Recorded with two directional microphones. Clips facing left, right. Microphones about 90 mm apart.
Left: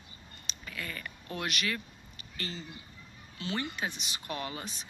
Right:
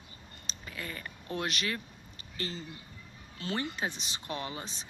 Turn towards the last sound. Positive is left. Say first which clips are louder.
# even
turn(degrees=-25)  # may be behind; listen again after turning